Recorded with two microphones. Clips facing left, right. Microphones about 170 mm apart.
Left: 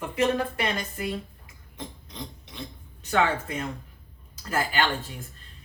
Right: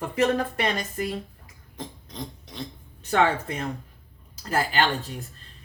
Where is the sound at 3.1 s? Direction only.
35° right (ahead or behind).